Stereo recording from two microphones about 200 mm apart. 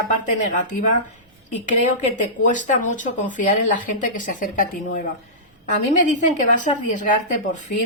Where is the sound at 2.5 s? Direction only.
40° left (ahead or behind).